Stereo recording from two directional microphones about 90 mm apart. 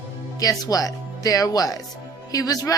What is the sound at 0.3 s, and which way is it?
A woman's voice, 45° left (ahead or behind).